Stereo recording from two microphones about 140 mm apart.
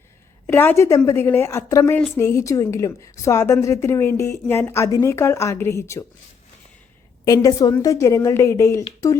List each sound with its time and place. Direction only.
0.4 s a woman's voice: 15° left (ahead or behind)
7.3 s a woman's voice: 25° left (ahead or behind)